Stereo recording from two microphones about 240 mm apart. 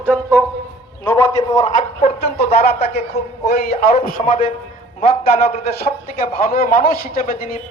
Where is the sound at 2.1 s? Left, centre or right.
Left.